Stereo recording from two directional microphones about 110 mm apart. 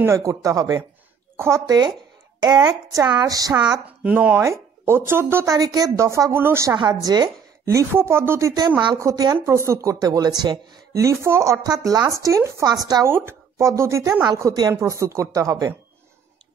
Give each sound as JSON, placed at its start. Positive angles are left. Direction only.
{"t": 0.0, "sound": "a woman's voice", "side_deg": -25}
{"t": 2.4, "sound": "speech", "side_deg": -35}
{"t": 4.0, "sound": "a woman's voice", "side_deg": -15}
{"t": 6.8, "sound": "speech", "side_deg": -35}
{"t": 7.6, "sound": "a woman's voice", "side_deg": -25}
{"t": 13.0, "sound": "a woman's voice", "side_deg": -20}